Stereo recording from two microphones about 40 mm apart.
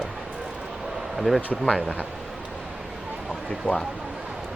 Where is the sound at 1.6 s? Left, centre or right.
Centre.